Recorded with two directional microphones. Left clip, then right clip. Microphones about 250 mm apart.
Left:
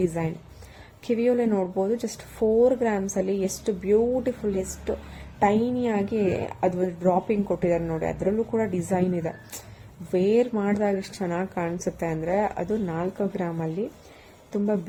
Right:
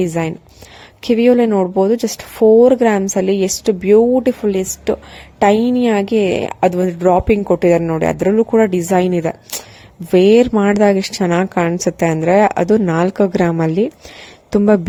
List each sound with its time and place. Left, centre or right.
0.0 s a woman's voice: right